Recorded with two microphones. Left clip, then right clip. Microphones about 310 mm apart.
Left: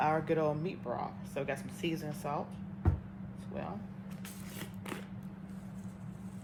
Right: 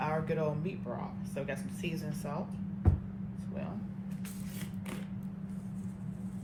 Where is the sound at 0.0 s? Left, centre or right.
Left.